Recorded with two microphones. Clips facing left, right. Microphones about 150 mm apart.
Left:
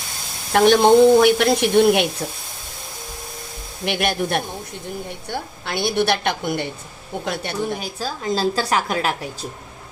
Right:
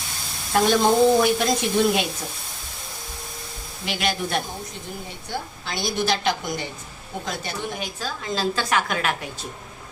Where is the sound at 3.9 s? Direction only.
60° left (ahead or behind).